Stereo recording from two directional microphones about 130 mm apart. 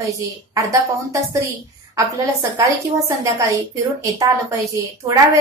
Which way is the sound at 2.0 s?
25° right (ahead or behind).